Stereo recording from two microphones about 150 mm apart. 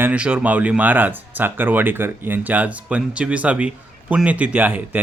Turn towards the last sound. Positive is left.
turn(degrees=-10)  # may be behind; listen again after turning